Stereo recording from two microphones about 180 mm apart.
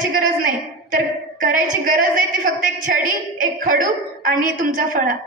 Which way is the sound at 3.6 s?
50° right (ahead or behind).